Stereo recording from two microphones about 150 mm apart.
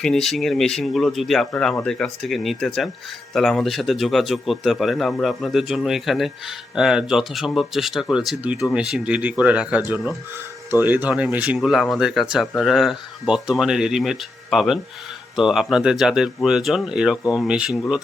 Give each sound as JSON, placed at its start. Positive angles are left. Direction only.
{"t": 0.0, "sound": "a man's voice", "side_deg": 5}